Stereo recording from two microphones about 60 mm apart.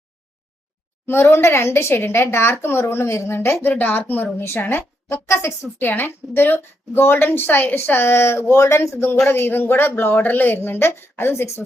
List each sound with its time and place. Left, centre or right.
1.0 s a woman's voice: left
5.3 s speech: left
5.9 s a woman's voice: left
9.2 s a woman's voice: left